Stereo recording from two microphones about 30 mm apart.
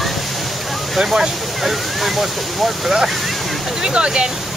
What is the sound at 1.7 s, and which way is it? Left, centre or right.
Speech, centre.